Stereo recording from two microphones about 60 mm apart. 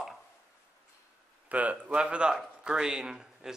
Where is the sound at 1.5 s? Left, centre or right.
Right; by 3.5 s centre.